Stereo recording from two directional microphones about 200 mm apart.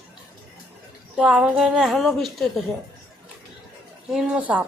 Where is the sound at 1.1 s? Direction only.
5° right (ahead or behind).